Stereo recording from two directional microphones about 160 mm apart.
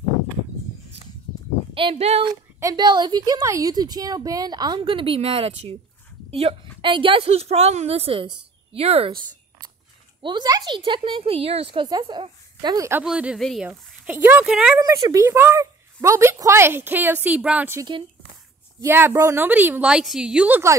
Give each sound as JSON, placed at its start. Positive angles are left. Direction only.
{"t": 1.7, "sound": "speech", "side_deg": -35}
{"t": 2.6, "sound": "a woman's voice", "side_deg": -25}
{"t": 10.2, "sound": "a woman's voice", "side_deg": -25}
{"t": 13.0, "sound": "speech", "side_deg": -5}
{"t": 13.7, "sound": "speech", "side_deg": -15}
{"t": 14.8, "sound": "a woman's voice", "side_deg": -25}